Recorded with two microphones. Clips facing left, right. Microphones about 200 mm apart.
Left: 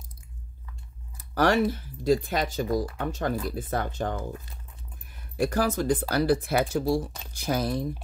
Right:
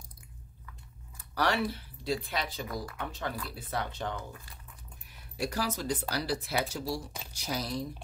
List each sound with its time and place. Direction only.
1.3 s speech: 45° left (ahead or behind)